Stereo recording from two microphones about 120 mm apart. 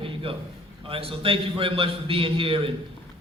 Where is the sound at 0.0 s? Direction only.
50° right (ahead or behind).